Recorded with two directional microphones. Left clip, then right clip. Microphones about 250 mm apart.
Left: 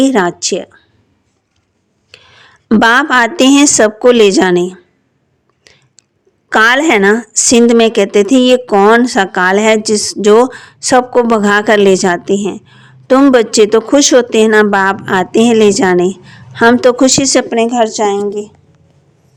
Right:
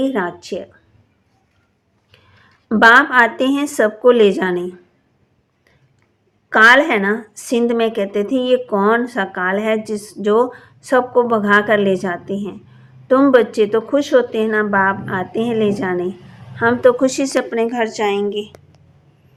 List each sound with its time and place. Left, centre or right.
0.0 s a woman's voice: left
2.1 s speech: left
6.5 s a woman's voice: left; by 18.5 s centre